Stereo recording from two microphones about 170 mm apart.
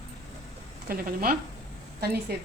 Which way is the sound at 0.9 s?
60° right (ahead or behind).